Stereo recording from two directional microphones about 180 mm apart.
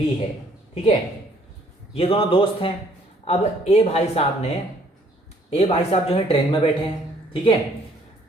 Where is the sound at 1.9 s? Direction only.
30° left (ahead or behind).